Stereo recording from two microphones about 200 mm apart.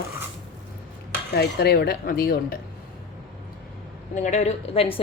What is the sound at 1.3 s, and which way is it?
Cutlery, 55° left (ahead or behind).